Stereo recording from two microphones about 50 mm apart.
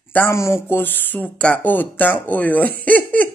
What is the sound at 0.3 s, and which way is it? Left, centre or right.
Speech, left.